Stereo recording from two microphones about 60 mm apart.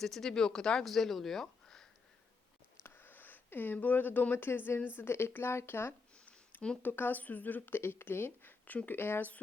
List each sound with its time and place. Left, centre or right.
0.0 s speech: centre
2.8 s speech: left
4.9 s speech: left
6.2 s a sound: left
6.8 s speech: left